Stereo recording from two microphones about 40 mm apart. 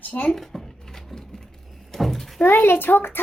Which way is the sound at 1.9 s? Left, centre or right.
Centre.